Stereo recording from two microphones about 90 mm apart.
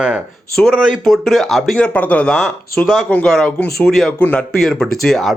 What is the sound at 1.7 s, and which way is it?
A man's voice, 15° left (ahead or behind).